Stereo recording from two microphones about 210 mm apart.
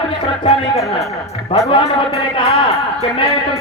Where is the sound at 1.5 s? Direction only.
25° left (ahead or behind).